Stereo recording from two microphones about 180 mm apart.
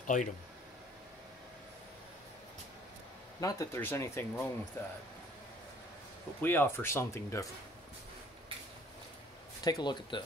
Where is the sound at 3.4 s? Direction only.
15° left (ahead or behind).